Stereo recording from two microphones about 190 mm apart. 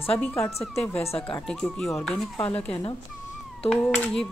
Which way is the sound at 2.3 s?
30° left (ahead or behind).